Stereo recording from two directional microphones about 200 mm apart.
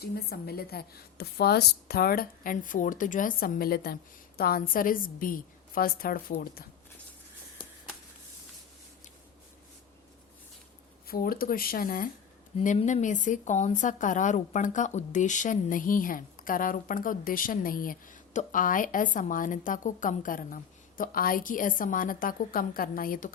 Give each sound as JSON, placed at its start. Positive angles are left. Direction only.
{"t": 0.0, "sound": "a woman's voice", "side_deg": 50}
{"t": 11.1, "sound": "a woman's voice", "side_deg": 45}